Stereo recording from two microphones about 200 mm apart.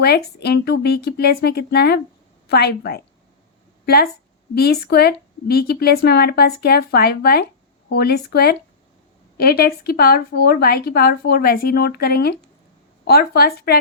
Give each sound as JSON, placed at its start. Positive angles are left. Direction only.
{"t": 0.0, "sound": "speech", "side_deg": 55}